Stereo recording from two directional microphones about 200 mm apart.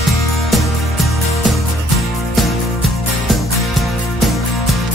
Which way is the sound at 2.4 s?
Centre (ahead or behind).